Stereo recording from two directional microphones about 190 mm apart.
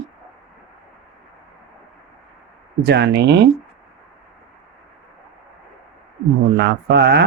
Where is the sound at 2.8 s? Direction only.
65° right (ahead or behind).